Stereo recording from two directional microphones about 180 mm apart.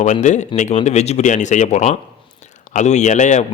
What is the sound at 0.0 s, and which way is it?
A man's voice, 40° left (ahead or behind).